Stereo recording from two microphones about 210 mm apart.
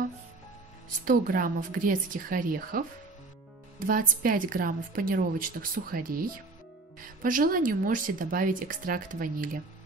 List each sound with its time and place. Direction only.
1.0 s a woman's voice: 40° right (ahead or behind)
3.8 s a woman's voice: 40° right (ahead or behind)
7.2 s a woman's voice: 40° right (ahead or behind)